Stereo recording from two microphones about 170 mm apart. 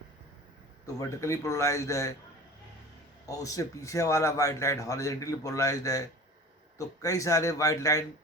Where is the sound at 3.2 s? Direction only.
20° left (ahead or behind).